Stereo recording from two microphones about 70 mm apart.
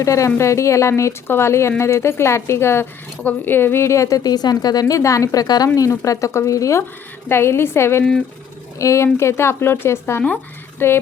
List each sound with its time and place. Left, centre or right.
0.0 s speech: left
4.2 s speech: left
5.6 s speech: left
7.3 s speech: left